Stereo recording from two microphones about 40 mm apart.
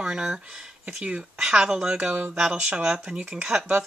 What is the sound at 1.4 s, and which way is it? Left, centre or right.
Speech, centre.